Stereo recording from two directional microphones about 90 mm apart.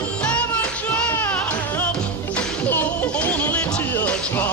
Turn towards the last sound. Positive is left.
turn(degrees=20)  # may be behind; listen again after turning